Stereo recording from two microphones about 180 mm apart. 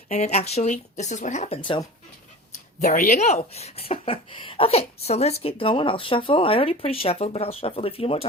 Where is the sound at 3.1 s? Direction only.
40° left (ahead or behind).